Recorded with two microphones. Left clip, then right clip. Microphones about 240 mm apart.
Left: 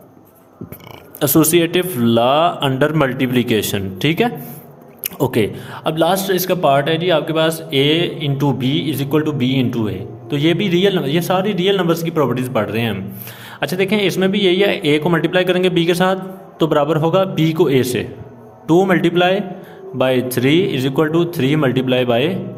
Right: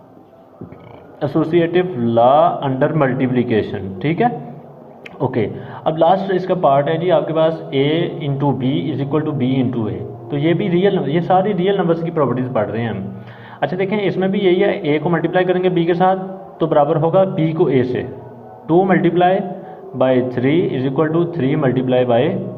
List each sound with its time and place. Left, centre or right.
1.2 s a man's voice: left